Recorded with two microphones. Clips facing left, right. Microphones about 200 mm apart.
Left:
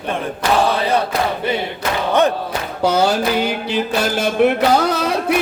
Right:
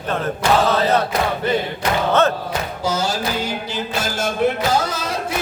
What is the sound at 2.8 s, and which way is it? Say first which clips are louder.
Music: left 8 dB; 60° left (ahead or behind).